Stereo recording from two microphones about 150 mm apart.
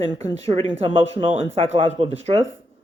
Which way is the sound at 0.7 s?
35° right (ahead or behind).